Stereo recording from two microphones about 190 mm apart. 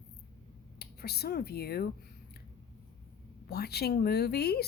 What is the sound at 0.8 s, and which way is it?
Speech, 55° left (ahead or behind).